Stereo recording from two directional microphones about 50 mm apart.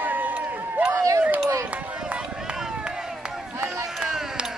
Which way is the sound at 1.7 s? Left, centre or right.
Right.